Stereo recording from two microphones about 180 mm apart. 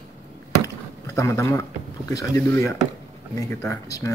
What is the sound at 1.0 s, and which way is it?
Speech, 15° left (ahead or behind).